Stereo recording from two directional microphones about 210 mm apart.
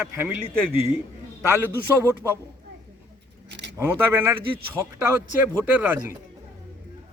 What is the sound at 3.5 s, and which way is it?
Keys jangling, 55° right (ahead or behind).